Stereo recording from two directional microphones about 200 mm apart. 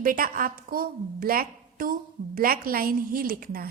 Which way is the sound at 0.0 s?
45° right (ahead or behind).